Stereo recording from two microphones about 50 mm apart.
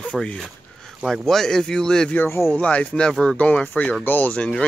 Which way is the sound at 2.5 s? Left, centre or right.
Left.